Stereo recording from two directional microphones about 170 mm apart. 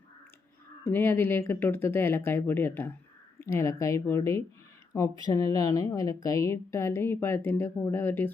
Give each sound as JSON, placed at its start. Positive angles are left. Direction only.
{"t": 0.9, "sound": "a woman's voice", "side_deg": 15}